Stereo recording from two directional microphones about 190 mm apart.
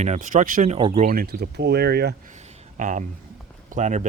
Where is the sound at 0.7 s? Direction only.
25° right (ahead or behind).